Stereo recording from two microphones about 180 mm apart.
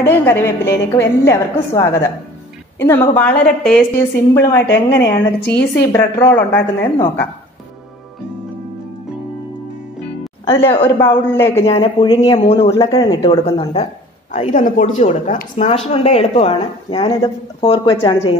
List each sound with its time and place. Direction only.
0.0 s a woman's voice: 15° left (ahead or behind)
4.3 s a woman's voice: 15° left (ahead or behind)
10.6 s a woman's voice: 15° left (ahead or behind)
11.6 s speech: 30° left (ahead or behind)
14.3 s speech: 40° left (ahead or behind)